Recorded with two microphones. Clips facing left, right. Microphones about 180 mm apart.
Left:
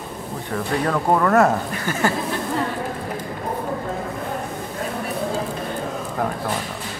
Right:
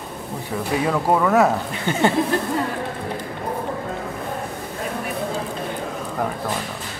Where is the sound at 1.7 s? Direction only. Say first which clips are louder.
Right 2 dB; 20° right (ahead or behind).